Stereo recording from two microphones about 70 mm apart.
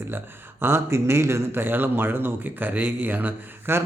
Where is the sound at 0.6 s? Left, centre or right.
Right.